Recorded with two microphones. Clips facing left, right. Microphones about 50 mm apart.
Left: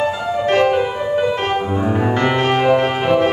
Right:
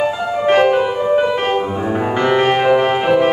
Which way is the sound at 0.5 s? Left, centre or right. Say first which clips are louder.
Right 3 dB; centre.